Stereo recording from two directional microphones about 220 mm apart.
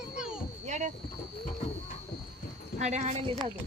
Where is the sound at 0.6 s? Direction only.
30° right (ahead or behind).